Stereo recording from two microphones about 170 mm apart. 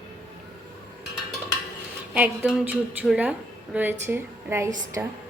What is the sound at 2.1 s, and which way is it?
A woman's voice, 10° right (ahead or behind).